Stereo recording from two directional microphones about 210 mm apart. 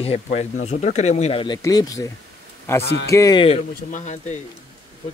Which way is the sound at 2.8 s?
50° left (ahead or behind).